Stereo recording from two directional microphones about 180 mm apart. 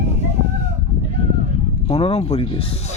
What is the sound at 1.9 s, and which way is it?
Speech, 35° left (ahead or behind).